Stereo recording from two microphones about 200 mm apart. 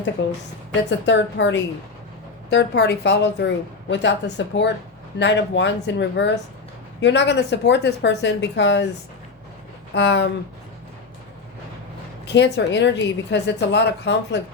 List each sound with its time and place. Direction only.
0.2 s a woman's voice: 65° left (ahead or behind)
9.9 s a woman's voice: 60° left (ahead or behind)
12.2 s a woman's voice: 60° left (ahead or behind)